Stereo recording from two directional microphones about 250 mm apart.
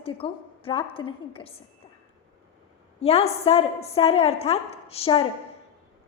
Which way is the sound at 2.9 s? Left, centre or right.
Left.